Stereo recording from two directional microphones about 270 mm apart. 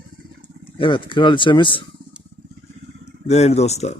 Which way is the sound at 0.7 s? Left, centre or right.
Centre.